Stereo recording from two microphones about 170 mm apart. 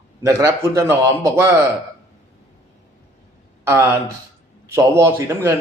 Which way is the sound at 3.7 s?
15° right (ahead or behind).